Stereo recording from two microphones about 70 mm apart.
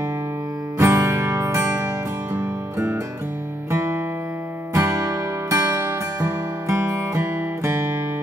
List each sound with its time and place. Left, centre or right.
0.7 s music: right
4.7 s music: right